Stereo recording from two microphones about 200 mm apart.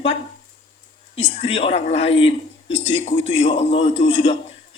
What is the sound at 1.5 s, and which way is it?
A man's voice, 30° left (ahead or behind).